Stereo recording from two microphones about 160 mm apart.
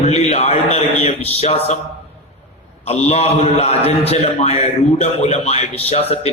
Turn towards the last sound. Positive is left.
turn(degrees=40)  # may be behind; listen again after turning